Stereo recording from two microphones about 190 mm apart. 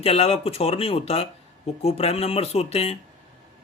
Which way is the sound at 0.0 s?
30° left (ahead or behind).